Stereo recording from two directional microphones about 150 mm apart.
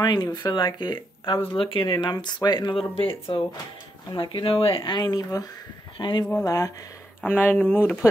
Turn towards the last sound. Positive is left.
turn(degrees=10)  # may be behind; listen again after turning